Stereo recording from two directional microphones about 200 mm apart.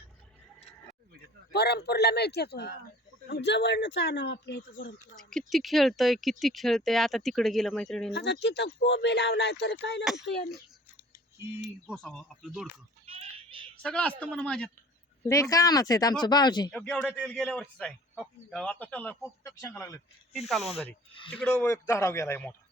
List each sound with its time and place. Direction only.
1.5 s speech: 55° left (ahead or behind)
5.1 s speech: centre (ahead or behind)
8.1 s speech: 55° left (ahead or behind)
10.0 s speech: centre (ahead or behind)
10.2 s speech: 55° left (ahead or behind)
11.5 s speech: 5° right (ahead or behind)
13.1 s a sound: 30° right (ahead or behind)
13.8 s speech: 5° left (ahead or behind)
15.3 s speech: 15° left (ahead or behind)
16.7 s speech: 5° left (ahead or behind)
20.5 s speech: centre (ahead or behind)